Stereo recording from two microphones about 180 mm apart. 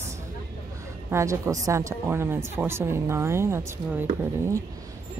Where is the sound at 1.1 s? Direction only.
15° right (ahead or behind).